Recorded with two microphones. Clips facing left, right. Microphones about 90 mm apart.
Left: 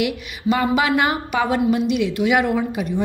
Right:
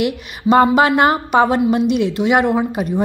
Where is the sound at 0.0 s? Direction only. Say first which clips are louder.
Right 3 dB; 40° right (ahead or behind).